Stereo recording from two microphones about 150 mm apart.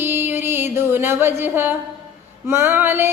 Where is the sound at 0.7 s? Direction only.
15° right (ahead or behind).